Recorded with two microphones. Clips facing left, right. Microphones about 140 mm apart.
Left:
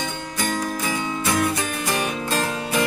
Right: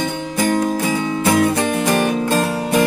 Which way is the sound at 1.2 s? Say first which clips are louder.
Right 8 dB; 60° right (ahead or behind).